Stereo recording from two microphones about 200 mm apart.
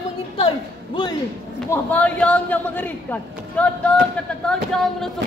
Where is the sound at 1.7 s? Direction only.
10° left (ahead or behind).